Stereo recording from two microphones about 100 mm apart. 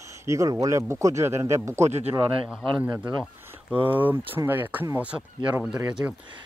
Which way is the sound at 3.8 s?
20° right (ahead or behind).